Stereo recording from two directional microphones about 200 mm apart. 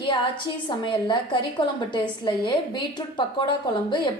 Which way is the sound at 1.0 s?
25° left (ahead or behind).